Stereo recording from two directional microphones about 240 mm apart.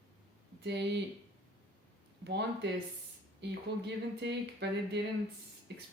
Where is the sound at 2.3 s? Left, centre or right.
Right.